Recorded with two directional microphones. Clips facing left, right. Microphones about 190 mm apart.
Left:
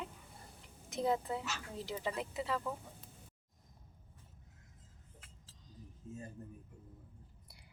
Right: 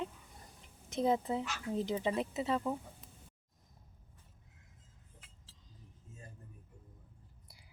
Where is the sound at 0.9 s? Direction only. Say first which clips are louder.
Right 3 dB; 20° right (ahead or behind).